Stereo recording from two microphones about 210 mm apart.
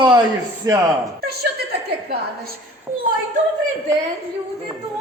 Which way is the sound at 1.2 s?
50° right (ahead or behind).